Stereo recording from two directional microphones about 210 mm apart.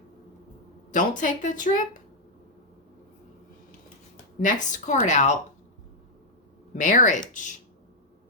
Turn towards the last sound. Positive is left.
turn(degrees=35)  # may be behind; listen again after turning